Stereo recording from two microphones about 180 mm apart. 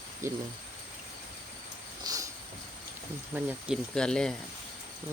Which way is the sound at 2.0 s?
20° right (ahead or behind).